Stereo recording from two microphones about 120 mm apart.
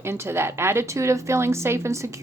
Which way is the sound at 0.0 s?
20° right (ahead or behind).